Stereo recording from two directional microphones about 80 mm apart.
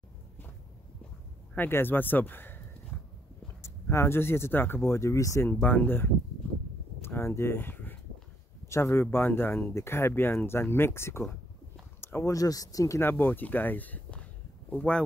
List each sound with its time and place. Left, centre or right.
1.7 s speech: left
2.9 s a sound: centre
3.6 s speech: left
5.5 s speech: left
8.6 s speech: left
12.0 s a sound: left
12.3 s speech: left
13.0 s speech: left